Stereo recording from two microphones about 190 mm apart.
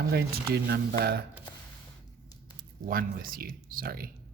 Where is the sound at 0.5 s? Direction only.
60° right (ahead or behind).